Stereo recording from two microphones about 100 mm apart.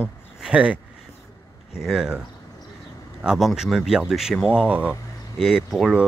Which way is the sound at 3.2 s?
5° right (ahead or behind).